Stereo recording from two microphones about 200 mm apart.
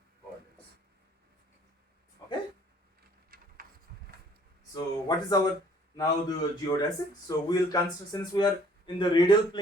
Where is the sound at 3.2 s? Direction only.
45° right (ahead or behind).